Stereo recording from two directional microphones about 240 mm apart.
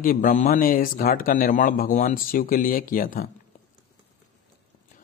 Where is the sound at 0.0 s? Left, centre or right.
Left.